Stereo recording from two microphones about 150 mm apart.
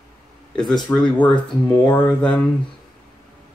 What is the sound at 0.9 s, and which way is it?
Speech, 15° left (ahead or behind).